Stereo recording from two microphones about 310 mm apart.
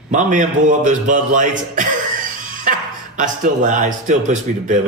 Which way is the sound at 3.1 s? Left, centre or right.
Right.